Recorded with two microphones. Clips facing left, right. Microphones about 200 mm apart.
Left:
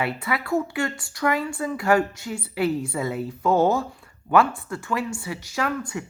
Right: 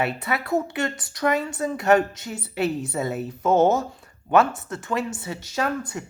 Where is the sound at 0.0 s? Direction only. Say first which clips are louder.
Right 1 dB; 25° right (ahead or behind).